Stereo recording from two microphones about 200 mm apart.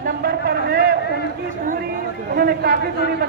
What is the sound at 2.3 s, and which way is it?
Speech, 50° right (ahead or behind).